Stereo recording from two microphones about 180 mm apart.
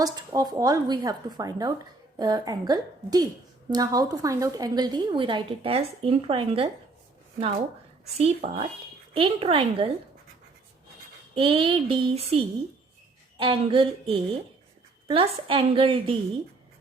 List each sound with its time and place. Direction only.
0.0 s a woman's voice: 20° right (ahead or behind)
8.2 s a woman's voice: 35° right (ahead or behind)
11.3 s a woman's voice: 30° right (ahead or behind)